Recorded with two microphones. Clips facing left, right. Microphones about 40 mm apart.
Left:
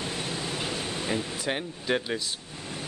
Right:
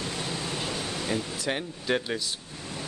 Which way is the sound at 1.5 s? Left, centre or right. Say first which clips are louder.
Even; centre.